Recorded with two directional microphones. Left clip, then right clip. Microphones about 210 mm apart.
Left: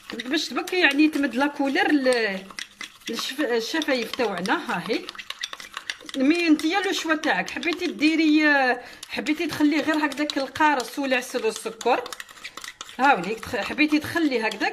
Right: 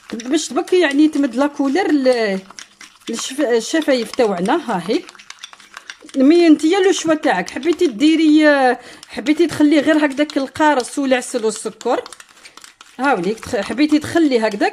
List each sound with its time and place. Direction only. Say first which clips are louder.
0.3 s speech: right 9 dB; 30° right (ahead or behind)
6.1 s speech: right 10 dB; 35° right (ahead or behind)